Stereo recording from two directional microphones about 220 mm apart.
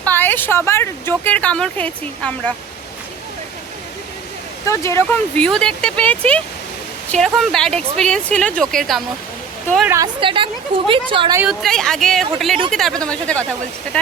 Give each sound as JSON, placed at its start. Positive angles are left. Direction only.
{"t": 0.0, "sound": "speech", "side_deg": 10}
{"t": 4.6, "sound": "speech", "side_deg": 15}
{"t": 10.0, "sound": "a woman's voice", "side_deg": -25}
{"t": 11.3, "sound": "speech", "side_deg": 0}